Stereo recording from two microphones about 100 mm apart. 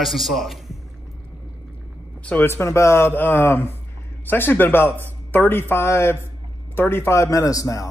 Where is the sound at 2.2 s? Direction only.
20° left (ahead or behind).